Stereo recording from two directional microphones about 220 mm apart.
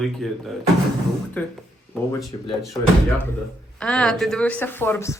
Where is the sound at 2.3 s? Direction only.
20° left (ahead or behind).